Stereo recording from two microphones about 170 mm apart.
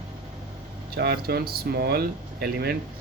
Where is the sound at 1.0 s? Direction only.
70° right (ahead or behind).